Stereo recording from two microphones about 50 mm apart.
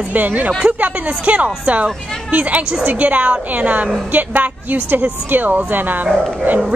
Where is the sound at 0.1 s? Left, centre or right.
Right.